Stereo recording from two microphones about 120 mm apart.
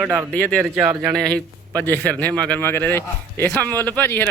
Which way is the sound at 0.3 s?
10° left (ahead or behind).